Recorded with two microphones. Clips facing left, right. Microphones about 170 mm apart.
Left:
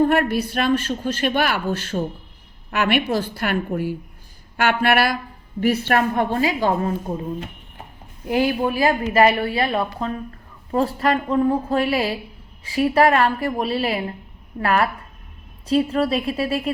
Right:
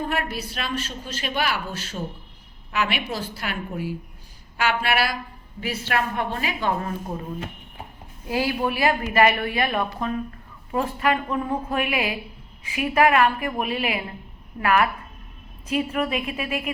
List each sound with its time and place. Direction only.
0.1 s a man's voice: 55° left (ahead or behind); by 6.9 s 35° left (ahead or behind)
8.3 s a woman's voice: 25° left (ahead or behind)
15.9 s a woman's voice: 35° left (ahead or behind)